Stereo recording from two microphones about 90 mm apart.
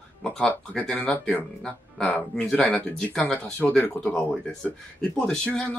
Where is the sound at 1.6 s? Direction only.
5° left (ahead or behind); by 4.2 s 25° left (ahead or behind).